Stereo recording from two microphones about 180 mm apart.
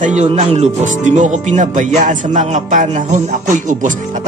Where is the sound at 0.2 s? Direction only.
35° right (ahead or behind).